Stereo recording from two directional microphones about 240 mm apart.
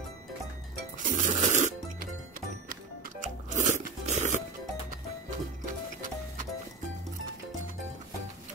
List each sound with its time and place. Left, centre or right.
0.9 s music: right